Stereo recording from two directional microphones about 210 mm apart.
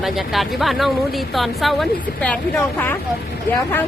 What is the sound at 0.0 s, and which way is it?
Speech, centre (ahead or behind).